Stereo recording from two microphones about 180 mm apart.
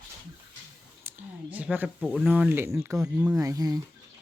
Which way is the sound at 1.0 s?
10° right (ahead or behind).